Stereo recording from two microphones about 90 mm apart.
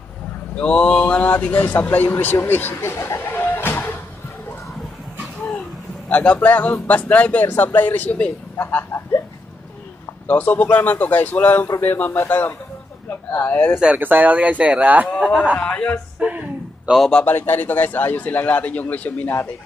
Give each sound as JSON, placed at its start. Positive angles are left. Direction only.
{"t": 0.6, "sound": "speech", "side_deg": 10}
{"t": 6.0, "sound": "speech", "side_deg": 15}
{"t": 10.2, "sound": "speech", "side_deg": 20}
{"t": 13.7, "sound": "speech", "side_deg": -15}
{"t": 15.1, "sound": "a sound", "side_deg": 0}
{"t": 15.5, "sound": "speech", "side_deg": 15}
{"t": 16.2, "sound": "a sound", "side_deg": -10}
{"t": 17.2, "sound": "speech", "side_deg": 20}